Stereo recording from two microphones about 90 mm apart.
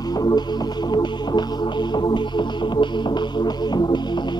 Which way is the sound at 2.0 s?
60° left (ahead or behind).